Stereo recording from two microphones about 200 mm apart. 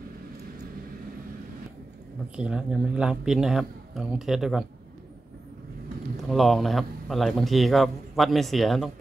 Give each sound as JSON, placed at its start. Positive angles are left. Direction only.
{"t": 2.3, "sound": "a man's voice", "side_deg": -5}
{"t": 6.2, "sound": "a man's voice", "side_deg": 0}